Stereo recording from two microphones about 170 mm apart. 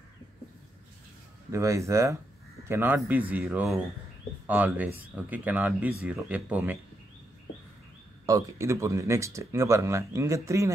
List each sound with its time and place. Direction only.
1.5 s speech: 15° right (ahead or behind)
8.3 s speech: 20° right (ahead or behind)